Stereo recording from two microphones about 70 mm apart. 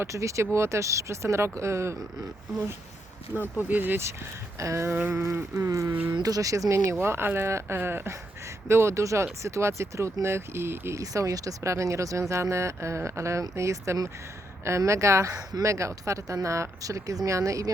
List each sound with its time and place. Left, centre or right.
0.0 s speech: right
3.7 s speech: right
4.0 s speech: right
5.9 s speech: right
6.1 s speech: right
7.0 s speech: right
11.0 s speech: right